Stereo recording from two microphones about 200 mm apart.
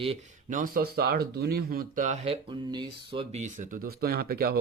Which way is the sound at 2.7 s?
25° right (ahead or behind).